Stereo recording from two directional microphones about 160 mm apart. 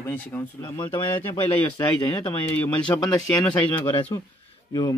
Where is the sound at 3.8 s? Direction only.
30° left (ahead or behind).